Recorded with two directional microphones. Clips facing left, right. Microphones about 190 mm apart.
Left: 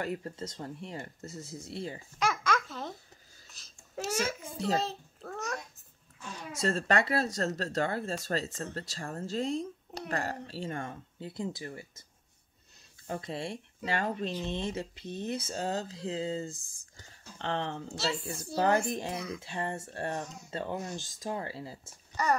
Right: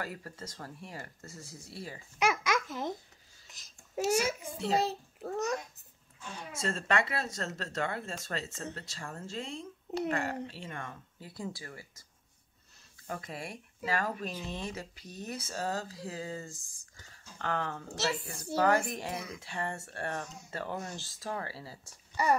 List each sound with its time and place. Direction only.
0.0 s speech: 25° left (ahead or behind)
2.1 s babbling: 10° right (ahead or behind)
6.5 s speech: 40° left (ahead or behind); by 12.0 s 20° left (ahead or behind)
13.0 s speech: 25° left (ahead or behind)
22.1 s speech: 10° right (ahead or behind)